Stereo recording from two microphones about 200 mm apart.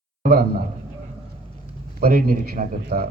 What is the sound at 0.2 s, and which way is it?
Speech, 50° right (ahead or behind).